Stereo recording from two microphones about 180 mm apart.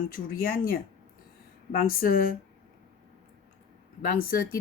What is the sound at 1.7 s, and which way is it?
Speech, 55° left (ahead or behind).